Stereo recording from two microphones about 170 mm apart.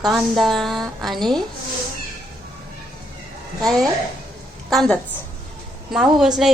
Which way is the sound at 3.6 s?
Centre (ahead or behind).